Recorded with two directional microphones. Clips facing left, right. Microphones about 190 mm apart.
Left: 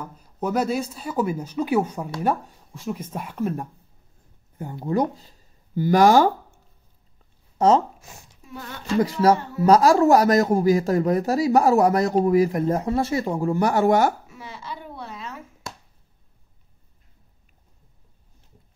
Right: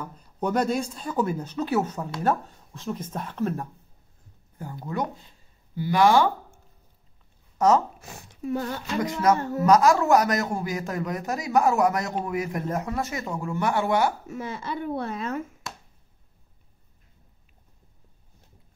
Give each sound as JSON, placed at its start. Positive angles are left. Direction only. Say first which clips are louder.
{"t": 0.0, "sound": "speech", "louder": "left 1 dB", "side_deg": 5}
{"t": 4.7, "sound": "speech", "louder": "left 7 dB", "side_deg": 35}
{"t": 7.5, "sound": "speech", "louder": "left 3 dB", "side_deg": 30}
{"t": 8.0, "sound": "a sound", "louder": "right 12 dB", "side_deg": -60}
{"t": 9.0, "sound": "a man's voice", "louder": "left 3 dB", "side_deg": 35}
{"t": 14.2, "sound": "speech", "louder": "right 6 dB", "side_deg": -50}